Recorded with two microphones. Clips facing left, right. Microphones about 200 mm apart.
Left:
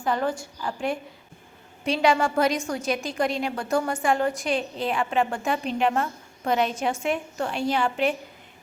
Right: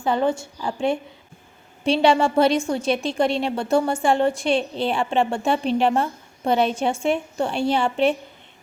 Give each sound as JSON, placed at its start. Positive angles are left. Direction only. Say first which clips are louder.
{"t": 0.0, "sound": "a woman's voice", "louder": "right 4 dB", "side_deg": -25}